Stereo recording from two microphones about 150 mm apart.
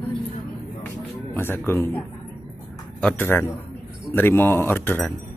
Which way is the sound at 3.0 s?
15° left (ahead or behind).